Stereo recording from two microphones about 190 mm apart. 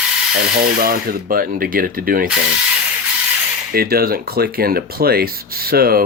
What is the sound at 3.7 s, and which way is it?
Speech, 50° right (ahead or behind).